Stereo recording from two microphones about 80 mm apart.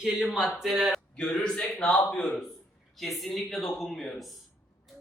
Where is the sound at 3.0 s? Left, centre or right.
Centre.